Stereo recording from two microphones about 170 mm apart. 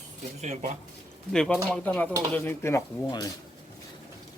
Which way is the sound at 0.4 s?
45° right (ahead or behind).